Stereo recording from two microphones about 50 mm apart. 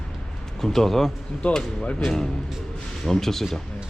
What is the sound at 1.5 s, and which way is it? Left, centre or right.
Speech, left.